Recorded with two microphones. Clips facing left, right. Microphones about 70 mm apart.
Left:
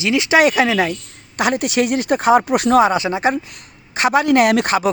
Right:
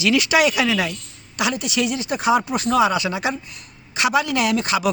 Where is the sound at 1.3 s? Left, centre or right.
Left.